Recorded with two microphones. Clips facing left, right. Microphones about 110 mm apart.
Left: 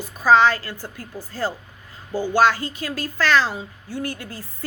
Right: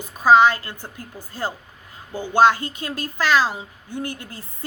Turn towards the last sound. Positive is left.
turn(degrees=-20)  # may be behind; listen again after turning